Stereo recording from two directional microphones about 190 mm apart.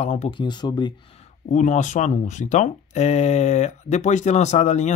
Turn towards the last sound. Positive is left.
turn(degrees=35)  # may be behind; listen again after turning